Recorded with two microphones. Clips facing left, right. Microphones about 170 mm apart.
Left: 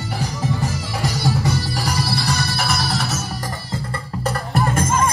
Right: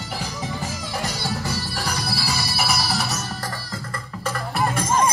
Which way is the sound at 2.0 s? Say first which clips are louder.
Left 4 dB; centre (ahead or behind).